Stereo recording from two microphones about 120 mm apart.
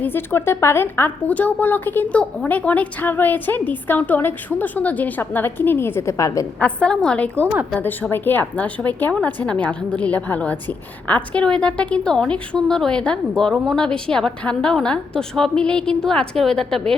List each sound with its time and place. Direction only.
0.0 s a woman's voice: 20° left (ahead or behind)
6.6 s a woman's voice: 10° left (ahead or behind)